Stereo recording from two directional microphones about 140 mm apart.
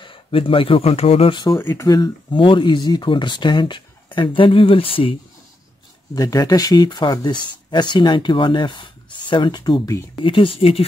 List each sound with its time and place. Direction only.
0.0 s speech: 40° left (ahead or behind)
1.6 s speech: 20° left (ahead or behind); by 5.1 s 40° left (ahead or behind)
6.1 s speech: 25° left (ahead or behind)
10.2 s speech: 40° left (ahead or behind)